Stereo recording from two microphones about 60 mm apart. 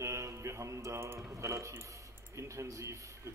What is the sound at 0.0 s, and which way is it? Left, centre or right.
Mantra, right.